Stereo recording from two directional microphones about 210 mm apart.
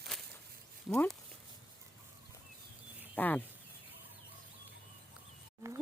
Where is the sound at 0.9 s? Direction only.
5° left (ahead or behind).